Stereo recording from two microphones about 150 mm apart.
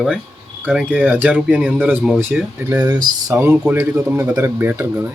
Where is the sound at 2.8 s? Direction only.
25° right (ahead or behind).